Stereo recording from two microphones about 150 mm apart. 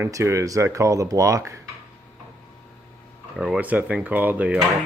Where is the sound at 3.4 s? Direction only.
5° right (ahead or behind).